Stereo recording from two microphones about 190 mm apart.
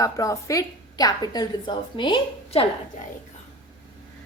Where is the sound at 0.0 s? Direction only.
15° left (ahead or behind).